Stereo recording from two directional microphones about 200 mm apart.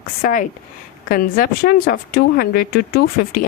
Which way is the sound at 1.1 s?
45° left (ahead or behind).